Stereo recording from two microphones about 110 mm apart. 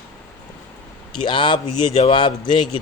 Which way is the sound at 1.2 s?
45° left (ahead or behind).